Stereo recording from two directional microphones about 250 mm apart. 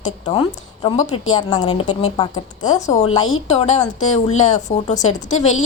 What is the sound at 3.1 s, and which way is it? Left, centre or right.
Speech, left.